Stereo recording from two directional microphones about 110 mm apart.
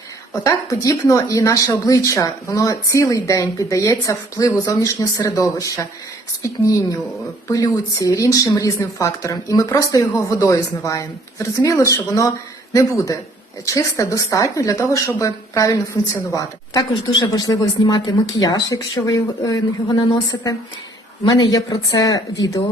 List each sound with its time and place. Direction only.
0.4 s speech: 30° left (ahead or behind)
7.4 s speech: 30° left (ahead or behind)
13.7 s speech: 30° left (ahead or behind)